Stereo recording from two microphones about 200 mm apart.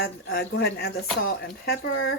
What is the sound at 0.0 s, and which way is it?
Speech, 50° left (ahead or behind).